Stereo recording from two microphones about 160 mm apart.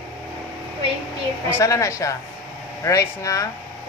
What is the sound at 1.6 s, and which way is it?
Speech, 20° left (ahead or behind).